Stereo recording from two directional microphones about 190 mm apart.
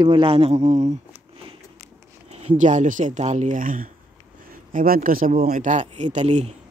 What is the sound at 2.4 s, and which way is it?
Speech, 40° right (ahead or behind).